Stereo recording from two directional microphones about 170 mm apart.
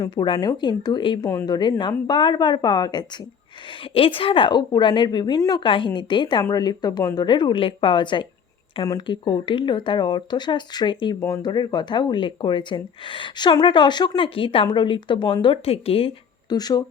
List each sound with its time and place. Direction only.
0.0 s speech: 25° left (ahead or behind)